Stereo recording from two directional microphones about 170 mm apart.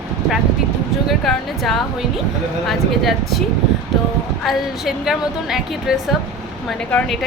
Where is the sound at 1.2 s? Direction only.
Centre (ahead or behind).